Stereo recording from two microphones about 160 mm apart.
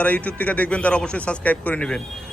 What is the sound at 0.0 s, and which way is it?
A man's voice, 10° left (ahead or behind).